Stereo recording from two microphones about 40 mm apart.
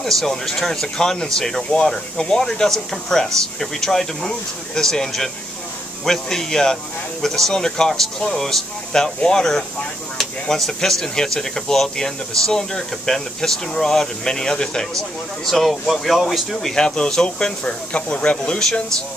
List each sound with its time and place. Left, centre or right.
0.0 s speech: centre
15.0 s speech: centre
16.7 s speech: left
17.9 s speech: left